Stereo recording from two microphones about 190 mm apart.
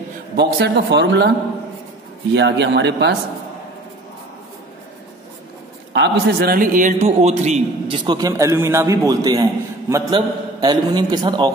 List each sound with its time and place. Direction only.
0.4 s a man's voice: 60° right (ahead or behind)
2.3 s a man's voice: 65° right (ahead or behind)
5.9 s a man's voice: 55° right (ahead or behind); by 8.0 s 35° right (ahead or behind)
8.0 s a man's voice: 20° right (ahead or behind)